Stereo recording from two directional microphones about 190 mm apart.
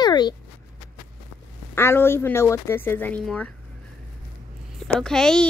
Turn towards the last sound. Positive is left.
turn(degrees=5)  # may be behind; listen again after turning